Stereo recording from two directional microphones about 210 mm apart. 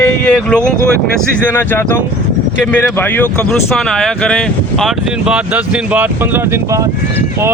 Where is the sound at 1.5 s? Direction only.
10° left (ahead or behind).